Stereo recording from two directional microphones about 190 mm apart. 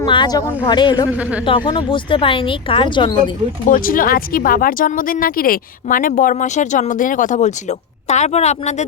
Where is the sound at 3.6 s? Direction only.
45° left (ahead or behind).